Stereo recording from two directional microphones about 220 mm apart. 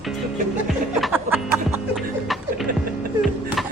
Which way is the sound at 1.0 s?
Centre (ahead or behind).